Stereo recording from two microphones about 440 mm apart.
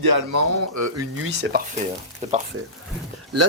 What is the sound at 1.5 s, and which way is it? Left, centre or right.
Speech, right.